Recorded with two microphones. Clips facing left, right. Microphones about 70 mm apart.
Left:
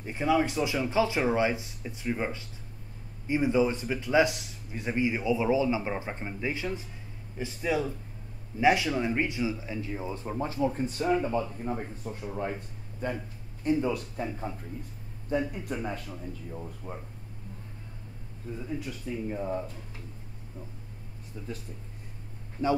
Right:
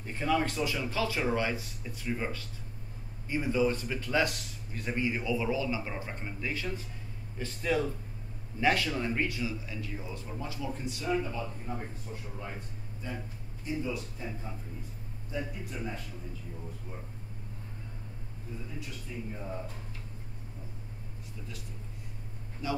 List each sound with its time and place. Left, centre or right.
0.0 s speech: centre; by 16.0 s left
19.1 s speech: left
22.6 s a man's voice: left